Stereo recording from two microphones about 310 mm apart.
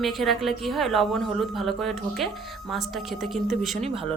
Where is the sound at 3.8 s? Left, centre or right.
Centre.